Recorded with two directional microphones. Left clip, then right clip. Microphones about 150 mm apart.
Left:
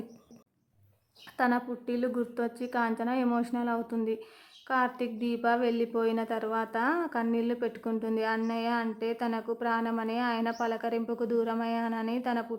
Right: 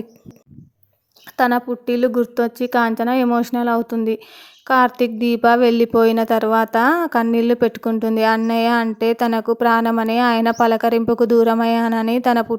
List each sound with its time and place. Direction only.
1.4 s a woman's voice: 40° right (ahead or behind)